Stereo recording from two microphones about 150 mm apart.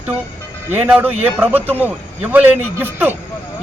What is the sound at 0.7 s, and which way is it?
A man's voice, 5° right (ahead or behind).